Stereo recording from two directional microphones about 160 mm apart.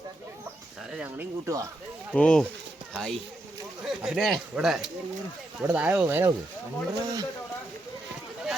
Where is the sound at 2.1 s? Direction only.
5° left (ahead or behind); by 6.3 s 15° right (ahead or behind).